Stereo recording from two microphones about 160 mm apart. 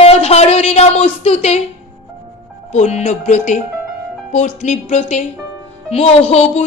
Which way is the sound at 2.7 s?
45° left (ahead or behind).